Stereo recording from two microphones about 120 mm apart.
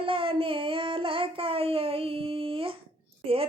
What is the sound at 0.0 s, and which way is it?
Child singing, 50° right (ahead or behind).